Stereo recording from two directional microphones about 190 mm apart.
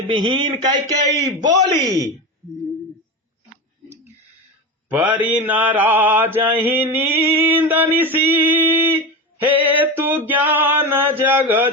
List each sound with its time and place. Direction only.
0.1 s speech: 25° right (ahead or behind)
4.9 s mantra: 10° right (ahead or behind)
10.2 s a sound: 10° right (ahead or behind)